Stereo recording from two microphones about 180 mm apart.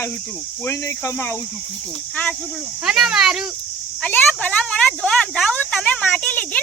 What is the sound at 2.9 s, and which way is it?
Speech, 5° right (ahead or behind).